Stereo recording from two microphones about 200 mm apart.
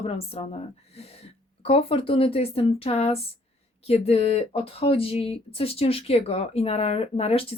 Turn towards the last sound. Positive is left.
turn(degrees=30)  # may be behind; listen again after turning